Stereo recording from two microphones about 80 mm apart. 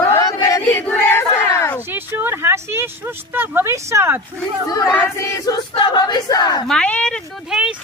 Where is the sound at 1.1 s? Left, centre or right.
Left.